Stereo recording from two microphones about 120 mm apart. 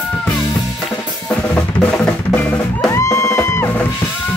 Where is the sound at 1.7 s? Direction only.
10° left (ahead or behind).